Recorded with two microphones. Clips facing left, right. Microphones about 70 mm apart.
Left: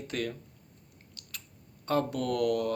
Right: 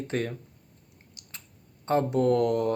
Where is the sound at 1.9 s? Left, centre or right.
Right.